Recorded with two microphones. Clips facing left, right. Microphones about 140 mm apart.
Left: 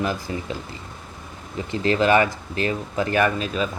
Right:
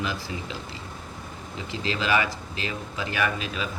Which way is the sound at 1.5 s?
50° left (ahead or behind).